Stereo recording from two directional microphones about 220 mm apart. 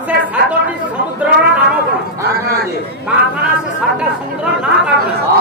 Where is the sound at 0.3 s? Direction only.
5° right (ahead or behind).